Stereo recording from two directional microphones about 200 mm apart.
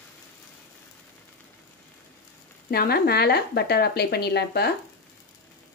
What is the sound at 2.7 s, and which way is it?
Speech, 50° left (ahead or behind).